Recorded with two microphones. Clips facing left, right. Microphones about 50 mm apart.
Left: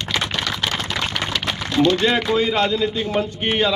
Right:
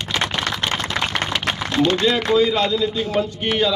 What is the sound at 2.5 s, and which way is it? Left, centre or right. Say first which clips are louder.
A man's voice: even; left.